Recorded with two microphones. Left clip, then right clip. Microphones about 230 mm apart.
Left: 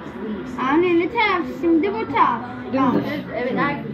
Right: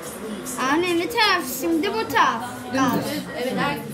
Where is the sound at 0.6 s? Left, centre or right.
Right.